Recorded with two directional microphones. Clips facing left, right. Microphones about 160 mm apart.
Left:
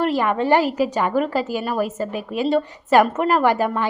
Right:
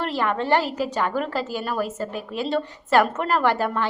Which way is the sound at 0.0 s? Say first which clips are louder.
Left 5 dB; 10° left (ahead or behind).